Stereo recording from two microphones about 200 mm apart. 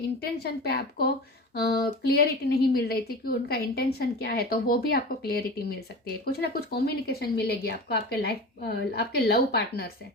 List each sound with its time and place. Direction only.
0.2 s speech: 50° left (ahead or behind)